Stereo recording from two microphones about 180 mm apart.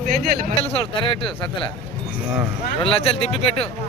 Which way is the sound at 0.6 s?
30° left (ahead or behind).